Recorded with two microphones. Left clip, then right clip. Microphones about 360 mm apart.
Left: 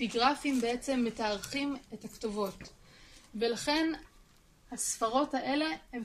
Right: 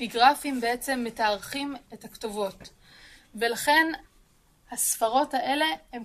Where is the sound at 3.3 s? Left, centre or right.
Right.